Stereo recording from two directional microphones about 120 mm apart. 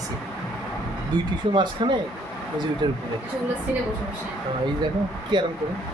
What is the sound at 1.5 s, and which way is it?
Speech, 40° right (ahead or behind).